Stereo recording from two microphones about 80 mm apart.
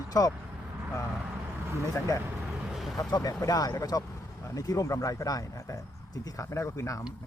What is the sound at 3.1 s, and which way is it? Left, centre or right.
Speech, left.